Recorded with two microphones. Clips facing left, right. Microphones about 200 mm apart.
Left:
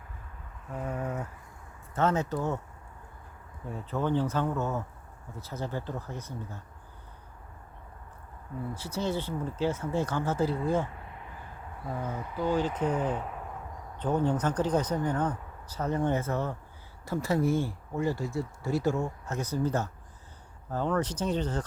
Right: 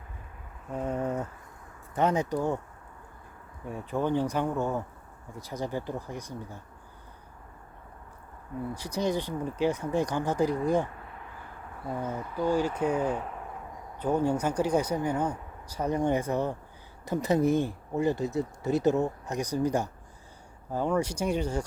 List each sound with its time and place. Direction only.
0.8 s a sound: 20° right (ahead or behind)
2.0 s speech: 15° right (ahead or behind)
3.7 s speech: 15° right (ahead or behind)
8.7 s speech: 15° right (ahead or behind)
12.1 s speech: 10° right (ahead or behind)